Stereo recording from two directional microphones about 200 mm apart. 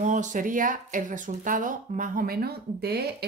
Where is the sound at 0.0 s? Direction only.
40° right (ahead or behind).